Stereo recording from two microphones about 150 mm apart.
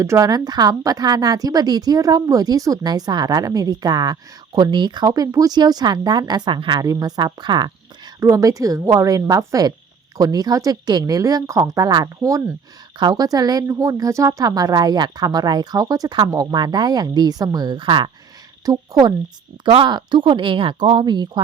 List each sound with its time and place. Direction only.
0.0 s a woman's voice: 20° right (ahead or behind)